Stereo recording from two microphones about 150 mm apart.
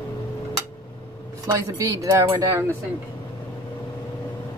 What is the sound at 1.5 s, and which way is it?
Speech, 20° right (ahead or behind).